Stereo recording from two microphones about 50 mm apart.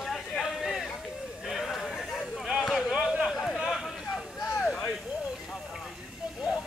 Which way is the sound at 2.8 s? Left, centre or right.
Centre.